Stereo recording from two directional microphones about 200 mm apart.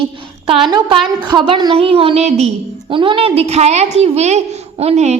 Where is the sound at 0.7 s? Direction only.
20° right (ahead or behind).